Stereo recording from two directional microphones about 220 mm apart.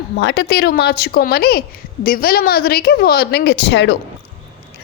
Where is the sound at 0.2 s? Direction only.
50° left (ahead or behind).